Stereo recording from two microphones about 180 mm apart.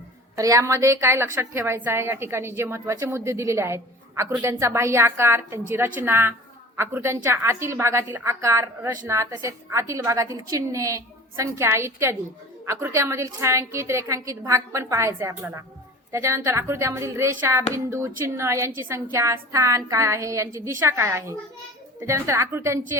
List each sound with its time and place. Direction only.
0.3 s a woman's voice: 20° right (ahead or behind)